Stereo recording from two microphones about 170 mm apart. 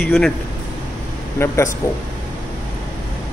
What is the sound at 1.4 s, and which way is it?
Speech, 15° left (ahead or behind).